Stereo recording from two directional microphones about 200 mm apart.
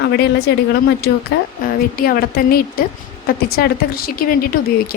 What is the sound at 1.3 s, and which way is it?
A woman's voice, 55° left (ahead or behind).